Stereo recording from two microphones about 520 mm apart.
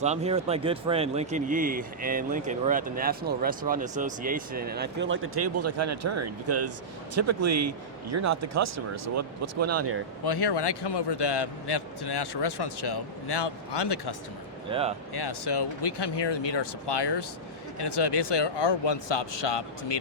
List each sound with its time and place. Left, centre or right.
0.0 s a man's voice: centre
10.2 s a man's voice: left
14.7 s a man's voice: centre
15.1 s a man's voice: left